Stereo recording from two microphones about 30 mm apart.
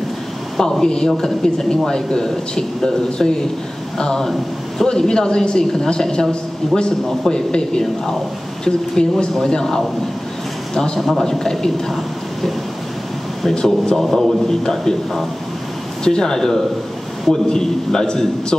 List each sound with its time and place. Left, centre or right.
0.6 s a woman's voice: centre
11.0 s a man's voice: centre
11.2 s a man's voice: centre
13.6 s a woman's voice: left
13.9 s a man's voice: centre
16.0 s a woman's voice: left